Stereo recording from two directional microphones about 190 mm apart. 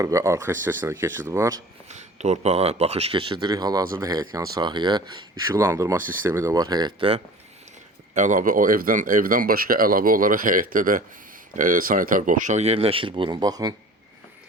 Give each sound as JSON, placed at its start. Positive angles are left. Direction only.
{"t": 0.0, "sound": "speech", "side_deg": -15}
{"t": 1.9, "sound": "speech", "side_deg": -35}
{"t": 8.1, "sound": "speech", "side_deg": -40}